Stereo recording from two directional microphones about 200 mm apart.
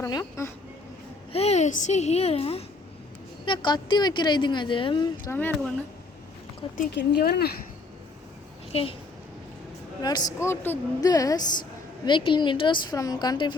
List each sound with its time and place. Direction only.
0.0 s a woman's voice: 15° left (ahead or behind)
1.3 s a woman's voice: 30° left (ahead or behind)
5.2 s a woman's voice: 10° left (ahead or behind)
6.9 s speech: 55° left (ahead or behind)
8.7 s speech: 30° left (ahead or behind)
10.0 s a woman's voice: 20° left (ahead or behind)